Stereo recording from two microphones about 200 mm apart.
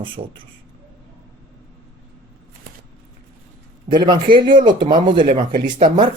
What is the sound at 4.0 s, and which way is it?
Speech, 20° right (ahead or behind).